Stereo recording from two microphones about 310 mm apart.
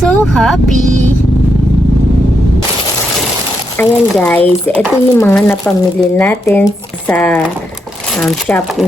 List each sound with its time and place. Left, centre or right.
0.3 s speech: centre
0.7 s speech: right
3.8 s speech: centre